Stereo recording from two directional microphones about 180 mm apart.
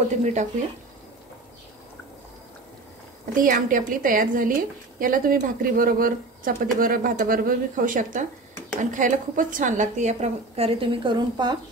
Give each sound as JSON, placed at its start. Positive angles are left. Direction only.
{"t": 0.2, "sound": "a woman's voice", "side_deg": -40}
{"t": 3.3, "sound": "a woman's voice", "side_deg": -50}